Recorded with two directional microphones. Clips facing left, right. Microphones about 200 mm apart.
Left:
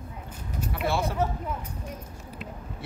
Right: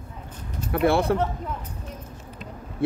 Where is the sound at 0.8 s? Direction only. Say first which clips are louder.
Right 8 dB; 60° right (ahead or behind).